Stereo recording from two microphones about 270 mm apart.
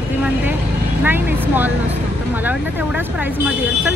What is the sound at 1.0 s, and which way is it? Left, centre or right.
Speech, centre.